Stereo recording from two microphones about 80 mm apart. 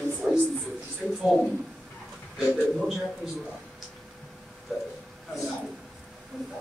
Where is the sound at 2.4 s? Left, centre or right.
Centre.